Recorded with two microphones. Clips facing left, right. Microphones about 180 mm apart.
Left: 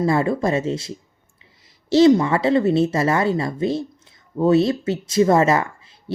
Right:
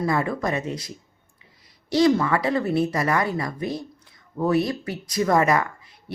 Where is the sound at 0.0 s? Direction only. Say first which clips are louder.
Left 5 dB; 30° left (ahead or behind).